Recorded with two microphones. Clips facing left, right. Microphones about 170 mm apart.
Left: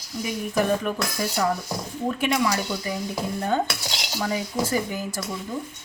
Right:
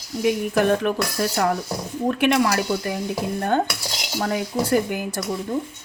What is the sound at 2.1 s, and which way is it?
A woman's voice, 65° right (ahead or behind).